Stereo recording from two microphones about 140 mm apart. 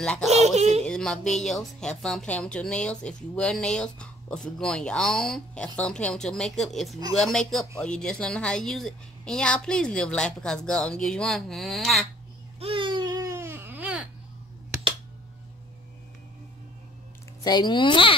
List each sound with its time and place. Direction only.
0.0 s speech: 5° left (ahead or behind)
0.6 s a sound: 50° right (ahead or behind)
0.8 s speech: 5° left (ahead or behind)
12.5 s baby cry: 40° right (ahead or behind); by 14.0 s 10° right (ahead or behind)
17.4 s speech: 30° left (ahead or behind)